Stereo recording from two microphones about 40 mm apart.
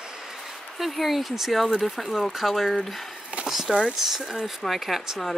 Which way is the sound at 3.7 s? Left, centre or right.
Right.